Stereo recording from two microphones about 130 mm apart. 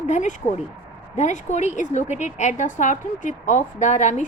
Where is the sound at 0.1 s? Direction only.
70° left (ahead or behind).